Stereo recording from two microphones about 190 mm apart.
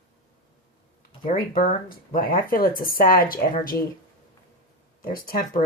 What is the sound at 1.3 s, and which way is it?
Speech, 50° left (ahead or behind).